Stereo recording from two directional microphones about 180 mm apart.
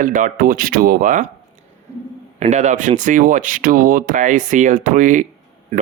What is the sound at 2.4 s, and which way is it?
Speech, 40° right (ahead or behind).